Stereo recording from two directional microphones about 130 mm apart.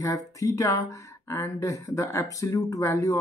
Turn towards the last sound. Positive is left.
turn(degrees=25)  # may be behind; listen again after turning